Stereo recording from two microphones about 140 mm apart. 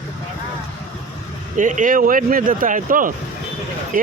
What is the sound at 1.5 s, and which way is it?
A man's voice, 65° right (ahead or behind).